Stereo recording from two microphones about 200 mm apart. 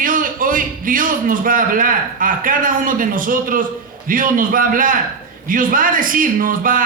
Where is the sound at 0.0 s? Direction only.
45° right (ahead or behind).